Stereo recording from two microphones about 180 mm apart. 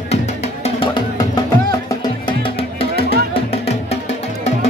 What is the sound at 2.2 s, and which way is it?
Music, 30° left (ahead or behind).